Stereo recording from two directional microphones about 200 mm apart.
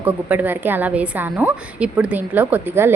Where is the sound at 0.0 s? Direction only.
10° right (ahead or behind).